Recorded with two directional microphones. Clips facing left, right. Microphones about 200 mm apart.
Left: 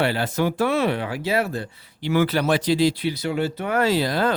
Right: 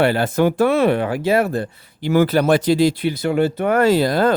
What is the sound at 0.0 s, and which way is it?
Speech, 50° right (ahead or behind).